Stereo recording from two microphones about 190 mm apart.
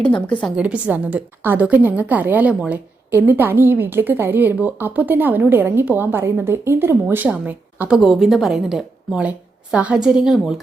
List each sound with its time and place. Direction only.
0.0 s a woman's voice: 5° left (ahead or behind)
0.4 s a woman's voice: 5° right (ahead or behind)